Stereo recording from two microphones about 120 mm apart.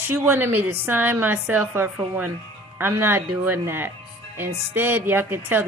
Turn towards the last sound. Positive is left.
turn(degrees=-15)  # may be behind; listen again after turning